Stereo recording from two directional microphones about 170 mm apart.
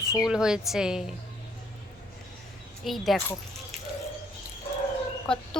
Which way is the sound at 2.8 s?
Centre (ahead or behind).